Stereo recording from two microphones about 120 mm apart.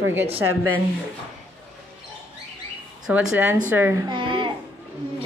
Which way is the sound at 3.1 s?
10° right (ahead or behind).